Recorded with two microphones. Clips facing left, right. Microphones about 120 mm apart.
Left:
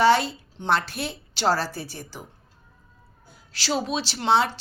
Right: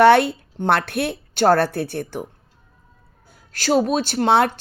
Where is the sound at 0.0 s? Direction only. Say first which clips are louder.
Right 6 dB; 60° right (ahead or behind).